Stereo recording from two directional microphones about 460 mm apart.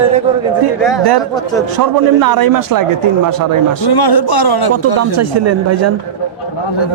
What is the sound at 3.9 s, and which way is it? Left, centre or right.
Speech, left.